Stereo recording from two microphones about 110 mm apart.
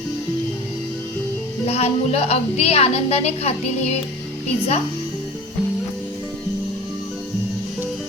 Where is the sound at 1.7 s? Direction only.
70° left (ahead or behind).